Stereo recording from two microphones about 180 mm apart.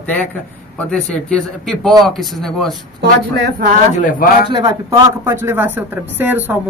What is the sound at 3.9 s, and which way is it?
Speech, 45° left (ahead or behind).